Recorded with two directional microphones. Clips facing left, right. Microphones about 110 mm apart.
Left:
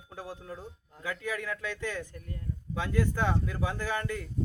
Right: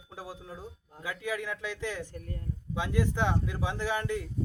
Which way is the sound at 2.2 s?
35° right (ahead or behind).